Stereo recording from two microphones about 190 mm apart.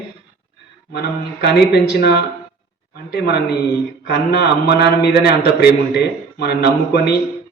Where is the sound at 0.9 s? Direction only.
60° left (ahead or behind).